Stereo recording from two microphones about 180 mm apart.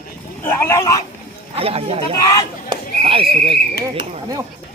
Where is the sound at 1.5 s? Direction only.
30° right (ahead or behind).